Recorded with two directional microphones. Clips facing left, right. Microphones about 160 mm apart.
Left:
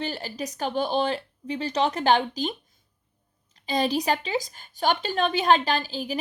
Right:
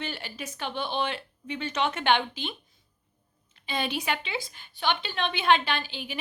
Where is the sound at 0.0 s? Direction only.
35° left (ahead or behind).